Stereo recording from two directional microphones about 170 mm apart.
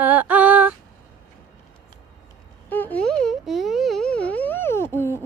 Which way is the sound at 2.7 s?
10° left (ahead or behind).